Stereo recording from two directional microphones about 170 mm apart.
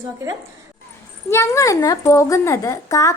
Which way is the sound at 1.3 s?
15° left (ahead or behind).